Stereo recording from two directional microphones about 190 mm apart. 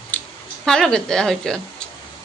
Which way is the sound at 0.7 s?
5° left (ahead or behind).